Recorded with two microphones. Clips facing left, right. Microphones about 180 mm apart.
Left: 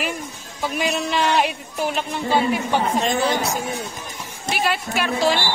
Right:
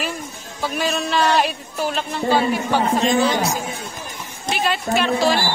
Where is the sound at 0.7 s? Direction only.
15° left (ahead or behind).